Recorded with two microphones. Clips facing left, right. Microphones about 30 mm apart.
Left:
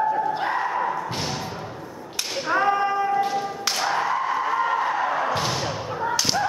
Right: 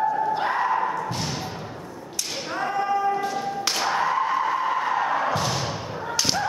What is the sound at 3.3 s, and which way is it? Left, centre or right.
Music, centre.